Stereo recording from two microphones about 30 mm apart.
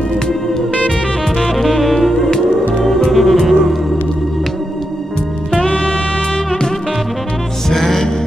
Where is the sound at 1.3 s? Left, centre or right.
Centre.